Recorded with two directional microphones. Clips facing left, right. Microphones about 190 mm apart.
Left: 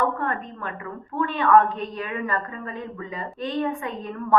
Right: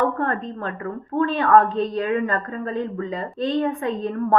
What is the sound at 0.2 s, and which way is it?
A woman's voice, 30° right (ahead or behind).